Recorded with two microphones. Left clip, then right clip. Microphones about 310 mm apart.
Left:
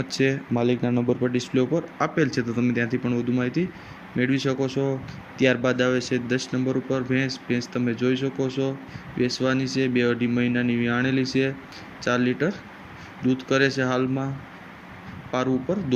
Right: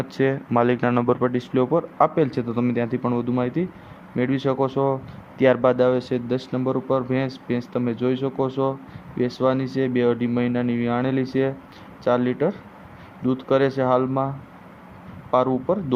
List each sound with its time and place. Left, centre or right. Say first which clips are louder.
0.2 s speech: right 4 dB; right
0.9 s speech: right 4 dB; right
1.2 s a man's voice: right 2 dB; right
15.3 s speech: right 5 dB; centre